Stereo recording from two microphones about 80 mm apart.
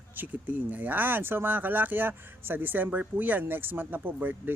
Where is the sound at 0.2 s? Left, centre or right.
Right.